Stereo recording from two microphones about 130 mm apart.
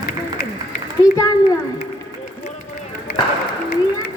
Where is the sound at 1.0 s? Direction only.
25° left (ahead or behind).